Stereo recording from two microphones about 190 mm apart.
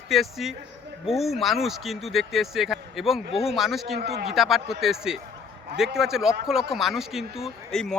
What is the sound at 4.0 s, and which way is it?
Speech, 60° right (ahead or behind).